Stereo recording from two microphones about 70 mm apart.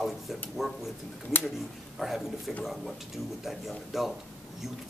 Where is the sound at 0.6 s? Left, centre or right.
Centre.